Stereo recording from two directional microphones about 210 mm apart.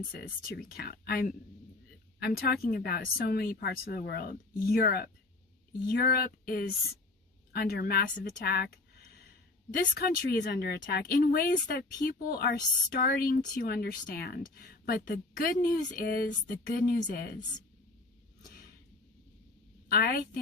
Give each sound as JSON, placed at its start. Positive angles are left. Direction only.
{"t": 0.1, "sound": "speech", "side_deg": 45}
{"t": 19.9, "sound": "speech", "side_deg": 45}